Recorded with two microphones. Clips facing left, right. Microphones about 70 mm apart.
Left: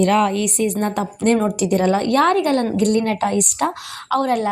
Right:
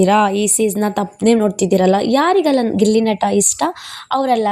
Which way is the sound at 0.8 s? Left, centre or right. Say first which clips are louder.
Right 4 dB; right.